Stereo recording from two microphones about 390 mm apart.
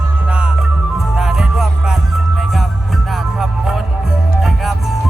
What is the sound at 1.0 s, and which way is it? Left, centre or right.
Music, centre.